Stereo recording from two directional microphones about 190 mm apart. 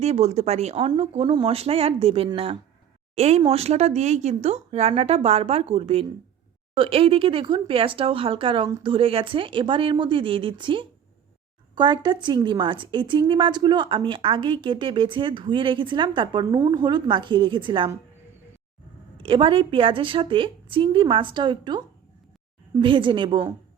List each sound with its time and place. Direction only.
0.0 s a woman's voice: 35° right (ahead or behind)
19.1 s a woman's voice: 30° right (ahead or behind)